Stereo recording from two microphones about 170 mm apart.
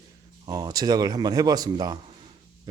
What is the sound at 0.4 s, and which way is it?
Speech, 25° right (ahead or behind).